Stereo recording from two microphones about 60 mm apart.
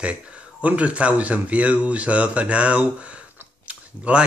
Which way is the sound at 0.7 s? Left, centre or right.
Right.